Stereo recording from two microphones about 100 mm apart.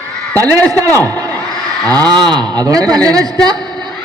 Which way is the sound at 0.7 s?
35° right (ahead or behind).